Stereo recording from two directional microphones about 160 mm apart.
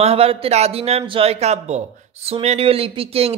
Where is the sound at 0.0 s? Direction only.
40° right (ahead or behind).